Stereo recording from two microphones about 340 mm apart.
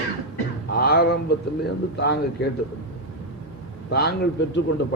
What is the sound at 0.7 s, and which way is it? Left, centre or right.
A man's voice, left.